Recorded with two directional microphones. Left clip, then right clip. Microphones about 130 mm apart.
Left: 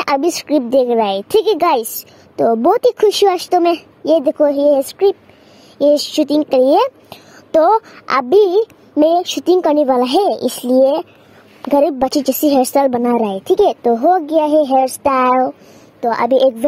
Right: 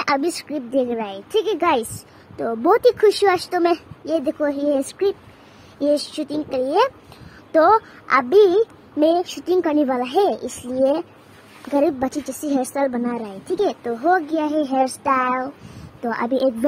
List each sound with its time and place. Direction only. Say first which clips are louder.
0.0 s a woman's voice: left 5 dB; 45° left (ahead or behind)
0.5 s a woman's voice: left 11 dB; 75° left (ahead or behind)
2.6 s a woman's voice: even; 50° left (ahead or behind)
5.8 s a woman's voice: left 8 dB; 60° left (ahead or behind)
16.0 s a woman's voice: left 9 dB; 40° left (ahead or behind)